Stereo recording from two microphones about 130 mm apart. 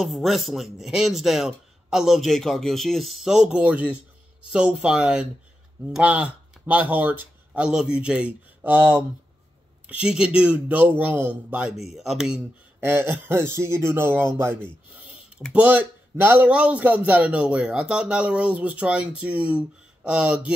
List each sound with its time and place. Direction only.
0.0 s speech: centre (ahead or behind)
12.8 s speech: 15° right (ahead or behind)
14.9 s a sound: 10° right (ahead or behind)
15.5 s speech: 10° right (ahead or behind)